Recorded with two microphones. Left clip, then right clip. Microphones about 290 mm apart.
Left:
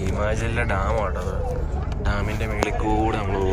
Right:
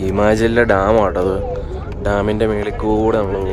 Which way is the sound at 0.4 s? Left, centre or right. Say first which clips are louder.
Right 12 dB; centre.